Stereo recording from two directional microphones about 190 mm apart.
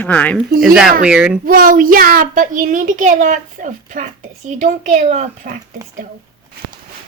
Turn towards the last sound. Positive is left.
turn(degrees=-40)  # may be behind; listen again after turning